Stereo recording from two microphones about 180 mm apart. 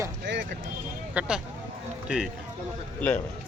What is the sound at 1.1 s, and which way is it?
A man's voice, 5° right (ahead or behind).